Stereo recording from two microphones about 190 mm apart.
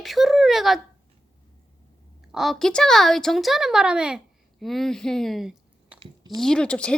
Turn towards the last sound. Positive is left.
turn(degrees=5)  # may be behind; listen again after turning